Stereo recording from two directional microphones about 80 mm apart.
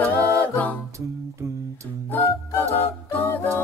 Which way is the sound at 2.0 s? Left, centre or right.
Left.